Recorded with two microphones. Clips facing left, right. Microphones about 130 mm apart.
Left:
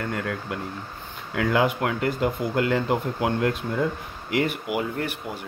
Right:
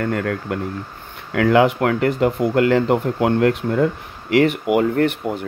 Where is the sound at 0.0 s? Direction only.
55° right (ahead or behind).